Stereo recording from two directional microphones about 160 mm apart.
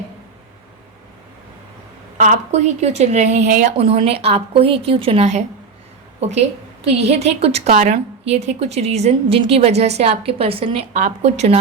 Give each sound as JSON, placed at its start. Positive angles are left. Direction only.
{"t": 2.1, "sound": "a woman's voice", "side_deg": -50}